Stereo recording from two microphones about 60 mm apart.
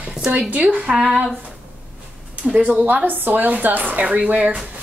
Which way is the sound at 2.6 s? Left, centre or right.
Right.